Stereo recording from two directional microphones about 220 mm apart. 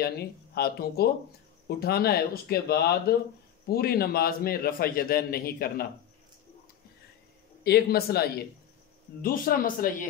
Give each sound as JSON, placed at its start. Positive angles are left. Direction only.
{"t": 0.0, "sound": "a man's voice", "side_deg": 45}
{"t": 7.6, "sound": "a man's voice", "side_deg": 45}